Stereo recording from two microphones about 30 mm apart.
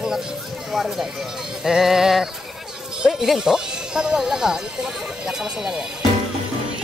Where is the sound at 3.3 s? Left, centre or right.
Right.